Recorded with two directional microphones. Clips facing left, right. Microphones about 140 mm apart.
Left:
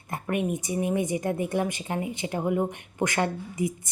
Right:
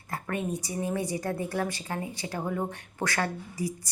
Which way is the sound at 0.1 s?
20° left (ahead or behind).